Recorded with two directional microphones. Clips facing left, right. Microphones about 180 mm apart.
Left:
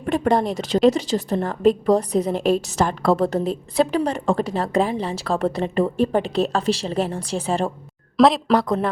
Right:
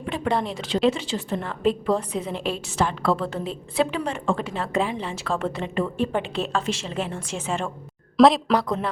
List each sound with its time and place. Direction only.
0.0 s a woman's voice: 45° left (ahead or behind)
8.1 s speech: centre (ahead or behind)
8.6 s speech: 50° left (ahead or behind)